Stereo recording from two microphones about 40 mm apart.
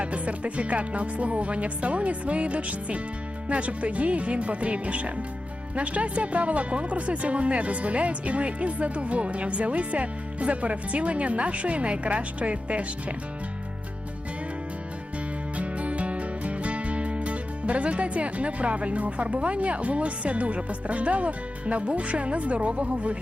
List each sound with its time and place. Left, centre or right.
0.0 s speech: right
15.5 s music: right